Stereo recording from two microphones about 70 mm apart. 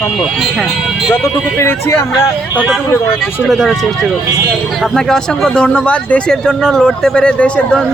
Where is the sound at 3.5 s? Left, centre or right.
Centre.